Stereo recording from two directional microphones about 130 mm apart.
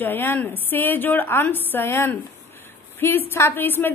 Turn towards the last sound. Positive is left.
turn(degrees=15)  # may be behind; listen again after turning